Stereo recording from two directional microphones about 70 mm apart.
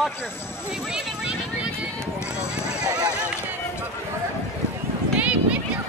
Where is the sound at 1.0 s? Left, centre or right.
Centre.